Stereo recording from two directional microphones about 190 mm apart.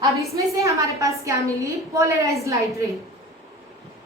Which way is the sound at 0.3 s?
15° right (ahead or behind).